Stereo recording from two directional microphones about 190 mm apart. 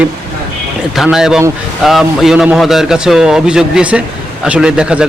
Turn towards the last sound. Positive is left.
turn(degrees=-5)  # may be behind; listen again after turning